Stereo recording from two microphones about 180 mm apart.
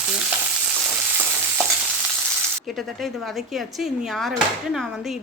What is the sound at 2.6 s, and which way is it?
Speech, centre (ahead or behind).